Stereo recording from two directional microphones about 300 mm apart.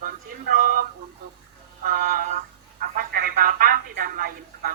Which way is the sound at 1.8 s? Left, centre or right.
Right.